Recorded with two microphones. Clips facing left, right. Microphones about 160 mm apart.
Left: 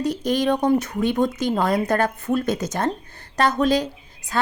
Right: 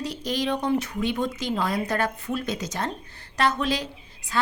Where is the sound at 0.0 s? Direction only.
50° left (ahead or behind).